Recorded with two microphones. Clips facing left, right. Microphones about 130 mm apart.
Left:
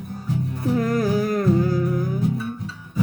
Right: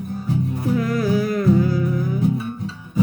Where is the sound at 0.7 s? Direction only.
45° left (ahead or behind).